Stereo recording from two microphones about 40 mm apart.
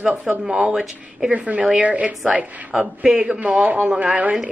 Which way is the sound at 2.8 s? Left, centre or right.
Right.